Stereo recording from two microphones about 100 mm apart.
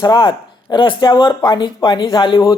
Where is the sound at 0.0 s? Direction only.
50° left (ahead or behind).